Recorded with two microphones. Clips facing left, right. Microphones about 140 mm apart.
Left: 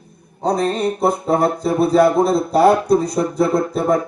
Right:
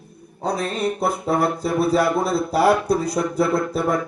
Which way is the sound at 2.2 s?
5° right (ahead or behind).